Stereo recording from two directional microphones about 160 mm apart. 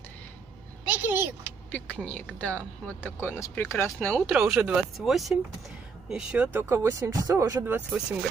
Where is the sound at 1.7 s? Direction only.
10° left (ahead or behind).